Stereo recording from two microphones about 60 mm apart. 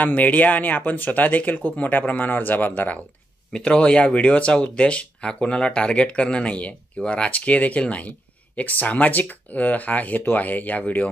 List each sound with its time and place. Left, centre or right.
0.0 s speech: left
3.5 s speech: centre